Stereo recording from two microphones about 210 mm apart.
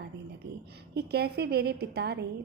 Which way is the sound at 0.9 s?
50° right (ahead or behind).